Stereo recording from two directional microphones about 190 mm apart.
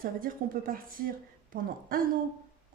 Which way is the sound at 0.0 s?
45° right (ahead or behind).